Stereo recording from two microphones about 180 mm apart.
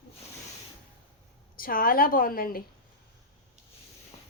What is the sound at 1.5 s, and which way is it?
A woman's voice, 50° left (ahead or behind).